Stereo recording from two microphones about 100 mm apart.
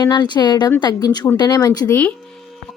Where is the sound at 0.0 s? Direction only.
45° left (ahead or behind).